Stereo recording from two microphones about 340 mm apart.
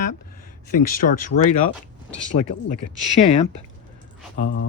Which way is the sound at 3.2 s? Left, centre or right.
Left.